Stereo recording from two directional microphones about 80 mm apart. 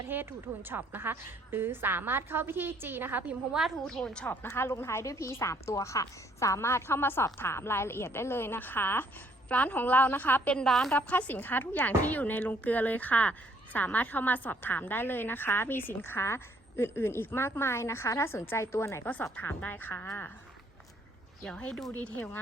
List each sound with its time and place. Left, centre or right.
0.0 s a woman's voice: right
3.8 s a woman's voice: centre
4.3 s a woman's voice: left
10.5 s a woman's voice: centre
10.9 s a woman's voice: left
21.4 s a woman's voice: centre